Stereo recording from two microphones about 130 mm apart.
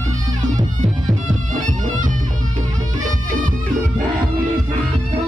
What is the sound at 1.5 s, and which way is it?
Music, 85° right.